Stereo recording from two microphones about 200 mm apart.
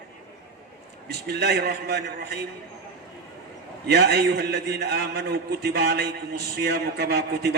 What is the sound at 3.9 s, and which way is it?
A man's voice, 55° right (ahead or behind).